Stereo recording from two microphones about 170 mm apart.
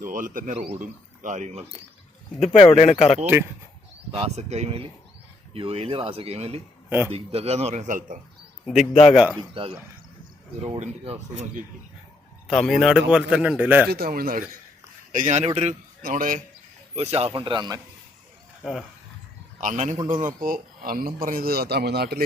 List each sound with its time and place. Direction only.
0.0 s speech: 50° right (ahead or behind)
2.4 s speech: 35° left (ahead or behind)
4.1 s a man's voice: 35° right (ahead or behind)
8.9 s speech: 35° left (ahead or behind)
10.8 s speech: 40° right (ahead or behind)
12.5 s a man's voice: centre (ahead or behind)
13.9 s speech: 60° right (ahead or behind)
15.1 s speech: 45° right (ahead or behind)
16.0 s a man's voice: 55° right (ahead or behind)
16.9 s a man's voice: 40° right (ahead or behind)
18.6 s a man's voice: centre (ahead or behind)
19.5 s a man's voice: 50° right (ahead or behind); by 22.2 s 70° right (ahead or behind)